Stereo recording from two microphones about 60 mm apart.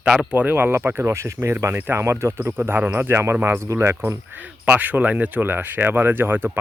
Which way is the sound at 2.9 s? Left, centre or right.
Right.